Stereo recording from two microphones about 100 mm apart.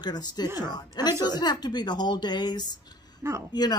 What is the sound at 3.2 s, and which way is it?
Speech, 30° right (ahead or behind).